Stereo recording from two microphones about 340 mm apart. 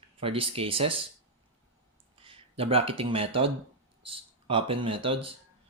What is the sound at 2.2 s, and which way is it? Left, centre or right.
Speech, centre.